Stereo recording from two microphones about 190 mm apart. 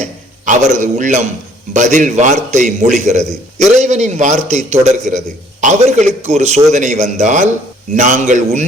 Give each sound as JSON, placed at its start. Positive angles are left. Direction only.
{"t": 0.0, "sound": "a man's voice", "side_deg": -40}